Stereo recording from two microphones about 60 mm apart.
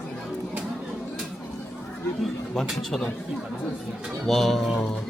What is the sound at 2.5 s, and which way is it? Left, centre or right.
Speech, centre.